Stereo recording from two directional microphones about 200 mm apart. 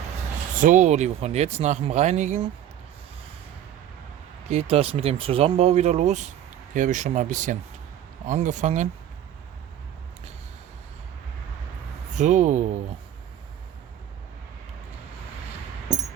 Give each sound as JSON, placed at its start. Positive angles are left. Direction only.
{"t": 0.6, "sound": "speech", "side_deg": -40}
{"t": 4.4, "sound": "speech", "side_deg": -30}
{"t": 12.1, "sound": "speech", "side_deg": -35}